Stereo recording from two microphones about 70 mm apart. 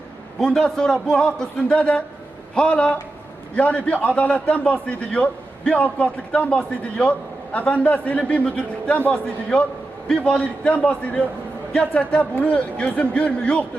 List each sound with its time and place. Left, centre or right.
0.3 s a man's voice: centre